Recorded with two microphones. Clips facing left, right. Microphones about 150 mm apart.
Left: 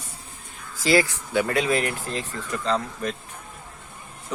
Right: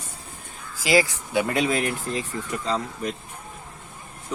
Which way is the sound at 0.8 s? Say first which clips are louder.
Even; 15° right (ahead or behind).